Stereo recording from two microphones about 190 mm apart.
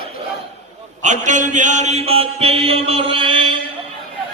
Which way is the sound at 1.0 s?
40° right (ahead or behind).